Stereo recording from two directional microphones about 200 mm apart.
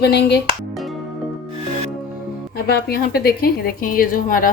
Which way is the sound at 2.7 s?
50° left (ahead or behind).